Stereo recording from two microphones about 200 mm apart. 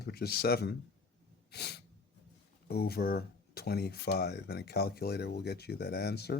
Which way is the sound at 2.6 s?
50° left (ahead or behind).